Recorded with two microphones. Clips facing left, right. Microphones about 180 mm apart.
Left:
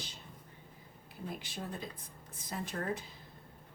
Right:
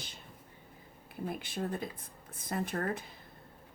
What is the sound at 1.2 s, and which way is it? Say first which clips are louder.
Speech: right 6 dB; 55° right (ahead or behind).